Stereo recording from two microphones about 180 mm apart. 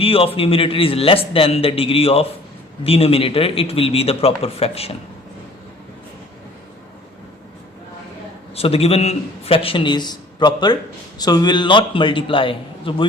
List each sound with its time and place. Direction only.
0.0 s a man's voice: 30° left (ahead or behind)
8.5 s a man's voice: 35° left (ahead or behind)